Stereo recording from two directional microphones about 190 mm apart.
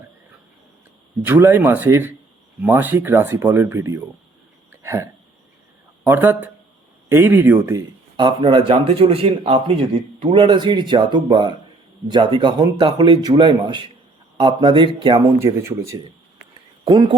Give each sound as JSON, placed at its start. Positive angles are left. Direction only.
{"t": 1.2, "sound": "speech", "side_deg": -10}
{"t": 4.7, "sound": "hiccup", "side_deg": -15}
{"t": 6.1, "sound": "speech", "side_deg": -10}
{"t": 15.4, "sound": "speech", "side_deg": -15}